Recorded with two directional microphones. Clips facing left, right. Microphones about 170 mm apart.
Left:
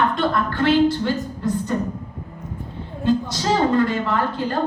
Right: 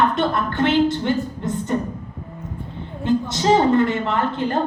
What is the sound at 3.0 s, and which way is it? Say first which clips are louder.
A woman's voice: right 1 dB; 20° right (ahead or behind).